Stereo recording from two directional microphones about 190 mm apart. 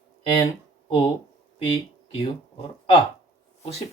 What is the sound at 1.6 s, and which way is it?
Speech, 25° left (ahead or behind).